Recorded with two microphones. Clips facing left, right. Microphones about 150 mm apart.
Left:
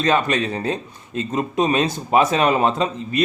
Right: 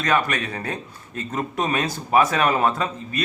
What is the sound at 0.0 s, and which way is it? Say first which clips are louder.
Speech: left 4 dB; 25° left (ahead or behind).